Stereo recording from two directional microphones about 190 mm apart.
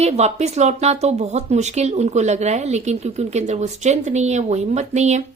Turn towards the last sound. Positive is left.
turn(degrees=-35)  # may be behind; listen again after turning